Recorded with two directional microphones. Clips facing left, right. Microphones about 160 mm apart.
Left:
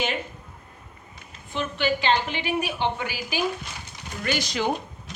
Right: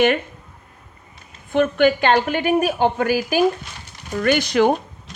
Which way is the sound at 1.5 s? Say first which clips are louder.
Right 10 dB; 55° right (ahead or behind).